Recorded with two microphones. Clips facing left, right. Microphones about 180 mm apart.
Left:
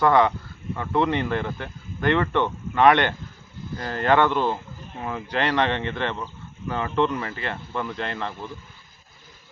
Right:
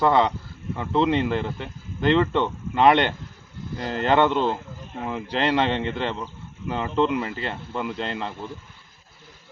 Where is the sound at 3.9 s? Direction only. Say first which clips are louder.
Even; 25° right (ahead or behind).